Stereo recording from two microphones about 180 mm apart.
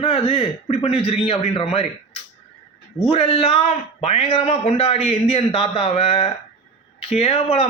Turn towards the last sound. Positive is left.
turn(degrees=35)  # may be behind; listen again after turning